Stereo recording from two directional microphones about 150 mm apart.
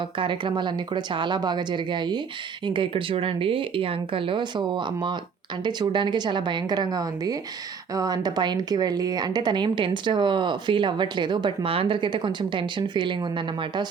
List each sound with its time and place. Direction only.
0.2 s a woman's voice: 35° right (ahead or behind)